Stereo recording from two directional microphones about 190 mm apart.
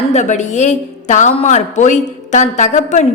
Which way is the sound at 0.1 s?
40° left (ahead or behind).